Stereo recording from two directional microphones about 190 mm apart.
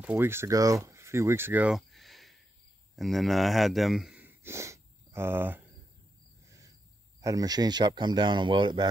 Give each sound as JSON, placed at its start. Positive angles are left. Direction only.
{"t": 0.0, "sound": "speech", "side_deg": -10}
{"t": 0.8, "sound": "a sound", "side_deg": -15}
{"t": 3.0, "sound": "speech", "side_deg": 0}
{"t": 7.2, "sound": "speech", "side_deg": -15}